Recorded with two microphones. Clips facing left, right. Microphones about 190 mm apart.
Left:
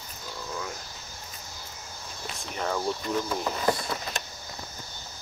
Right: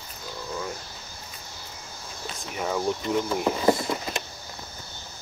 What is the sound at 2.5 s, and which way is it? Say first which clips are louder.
Speech: right 2 dB; 10° right (ahead or behind).